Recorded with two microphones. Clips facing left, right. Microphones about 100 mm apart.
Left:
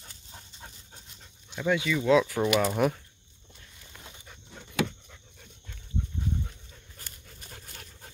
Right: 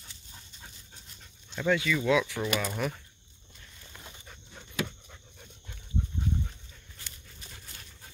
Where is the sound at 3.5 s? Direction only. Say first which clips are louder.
Even; 5° left (ahead or behind).